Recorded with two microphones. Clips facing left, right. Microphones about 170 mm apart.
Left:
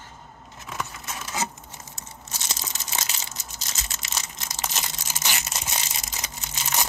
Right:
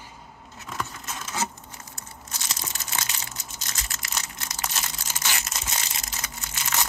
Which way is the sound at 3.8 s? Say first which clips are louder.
Even; 25° left (ahead or behind).